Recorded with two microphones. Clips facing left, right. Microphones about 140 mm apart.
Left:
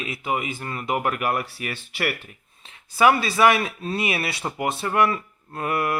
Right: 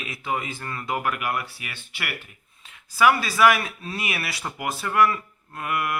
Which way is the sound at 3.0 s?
25° left (ahead or behind).